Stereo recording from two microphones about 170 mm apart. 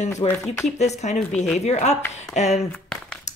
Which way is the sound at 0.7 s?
40° left (ahead or behind).